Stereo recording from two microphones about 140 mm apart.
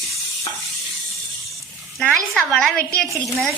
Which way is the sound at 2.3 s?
5° left (ahead or behind).